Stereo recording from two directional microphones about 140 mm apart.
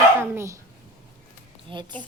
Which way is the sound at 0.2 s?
20° right (ahead or behind).